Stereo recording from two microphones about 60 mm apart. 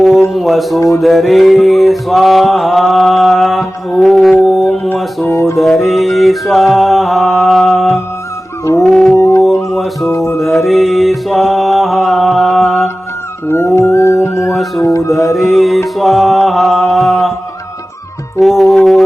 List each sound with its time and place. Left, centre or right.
0.3 s mantra: centre
5.2 s music: left
5.5 s mantra: centre
8.8 s music: centre
9.1 s music: left
9.6 s music: centre
10.1 s music: left
10.3 s mantra: centre
13.5 s dog: left
14.8 s music: left
15.1 s music: centre
16.0 s mantra: centre
18.3 s music: centre